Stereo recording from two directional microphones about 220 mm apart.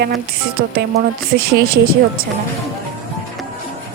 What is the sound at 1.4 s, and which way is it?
Speech, 45° right (ahead or behind).